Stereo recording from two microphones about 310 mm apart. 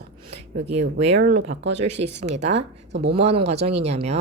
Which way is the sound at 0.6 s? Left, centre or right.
Right.